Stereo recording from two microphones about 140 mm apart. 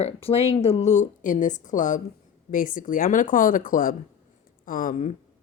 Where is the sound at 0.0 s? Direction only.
45° left (ahead or behind).